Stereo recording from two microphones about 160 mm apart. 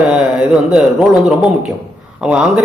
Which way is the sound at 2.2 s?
5° right (ahead or behind).